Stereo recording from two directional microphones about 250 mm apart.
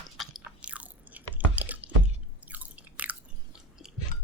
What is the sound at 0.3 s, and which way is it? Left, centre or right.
Chewing, centre.